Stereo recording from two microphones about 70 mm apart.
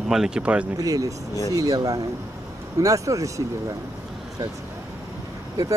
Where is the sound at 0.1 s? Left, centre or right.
Centre.